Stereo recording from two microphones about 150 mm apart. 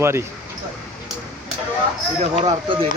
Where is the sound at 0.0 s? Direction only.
15° right (ahead or behind).